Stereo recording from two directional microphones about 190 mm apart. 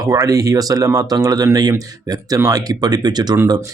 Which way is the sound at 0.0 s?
15° right (ahead or behind).